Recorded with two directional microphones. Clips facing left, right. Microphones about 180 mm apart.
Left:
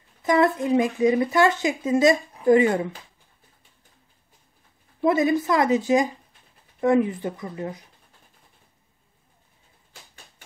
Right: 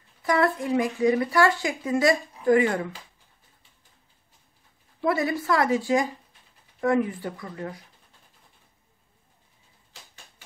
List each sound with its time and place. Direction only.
0.2 s speech: 20° left (ahead or behind)
5.0 s speech: 20° left (ahead or behind)